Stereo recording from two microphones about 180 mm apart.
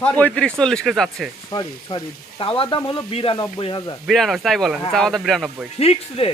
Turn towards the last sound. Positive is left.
turn(degrees=35)  # may be behind; listen again after turning